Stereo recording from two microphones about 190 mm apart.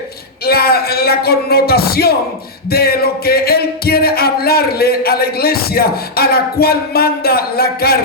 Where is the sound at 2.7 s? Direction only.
55° left (ahead or behind).